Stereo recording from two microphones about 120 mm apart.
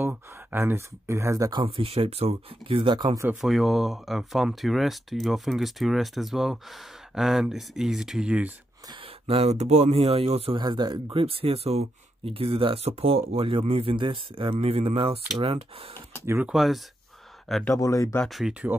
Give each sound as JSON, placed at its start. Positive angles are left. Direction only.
{"t": 0.0, "sound": "speech", "side_deg": -15}
{"t": 1.5, "sound": "speech", "side_deg": -45}
{"t": 3.3, "sound": "speech", "side_deg": 0}
{"t": 9.3, "sound": "speech", "side_deg": -60}
{"t": 10.6, "sound": "speech", "side_deg": -35}
{"t": 11.2, "sound": "speech", "side_deg": -55}
{"t": 16.4, "sound": "speech", "side_deg": 0}
{"t": 17.6, "sound": "speech", "side_deg": 30}
{"t": 18.2, "sound": "speech", "side_deg": 0}